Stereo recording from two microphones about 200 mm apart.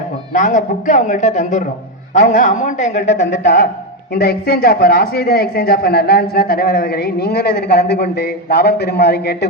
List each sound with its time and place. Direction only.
0.3 s speech: 40° left (ahead or behind)
3.2 s a man's voice: 60° left (ahead or behind)